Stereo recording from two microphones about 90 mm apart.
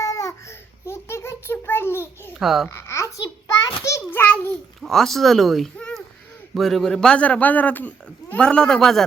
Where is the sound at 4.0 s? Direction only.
20° left (ahead or behind).